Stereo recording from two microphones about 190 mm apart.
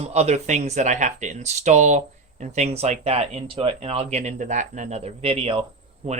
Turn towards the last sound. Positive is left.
turn(degrees=-30)  # may be behind; listen again after turning